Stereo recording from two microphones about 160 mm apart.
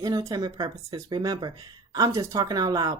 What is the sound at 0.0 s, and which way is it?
Speech, 20° right (ahead or behind).